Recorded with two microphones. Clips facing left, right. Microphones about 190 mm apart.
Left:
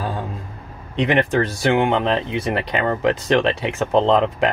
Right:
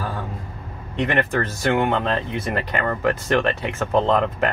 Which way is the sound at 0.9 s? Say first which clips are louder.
Left 3 dB; 15° left (ahead or behind).